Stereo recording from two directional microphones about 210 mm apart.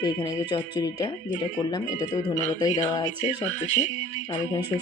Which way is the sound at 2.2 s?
35° left (ahead or behind).